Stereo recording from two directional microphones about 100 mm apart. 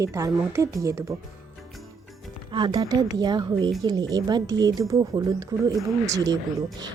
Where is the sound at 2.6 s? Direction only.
50° right (ahead or behind).